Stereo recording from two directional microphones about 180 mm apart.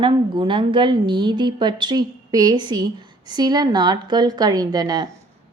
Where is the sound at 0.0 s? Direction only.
25° right (ahead or behind).